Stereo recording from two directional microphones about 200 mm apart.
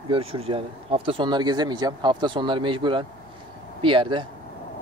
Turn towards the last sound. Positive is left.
turn(degrees=-25)  # may be behind; listen again after turning